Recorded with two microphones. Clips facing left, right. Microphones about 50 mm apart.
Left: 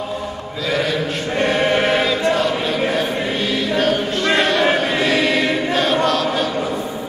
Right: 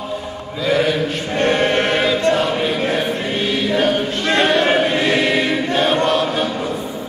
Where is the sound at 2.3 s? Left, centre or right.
Centre.